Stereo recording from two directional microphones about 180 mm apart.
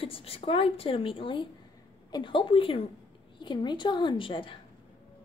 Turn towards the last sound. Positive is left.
turn(degrees=30)  # may be behind; listen again after turning